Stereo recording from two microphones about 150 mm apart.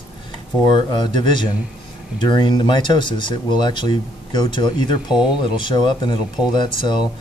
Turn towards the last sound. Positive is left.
turn(degrees=30)  # may be behind; listen again after turning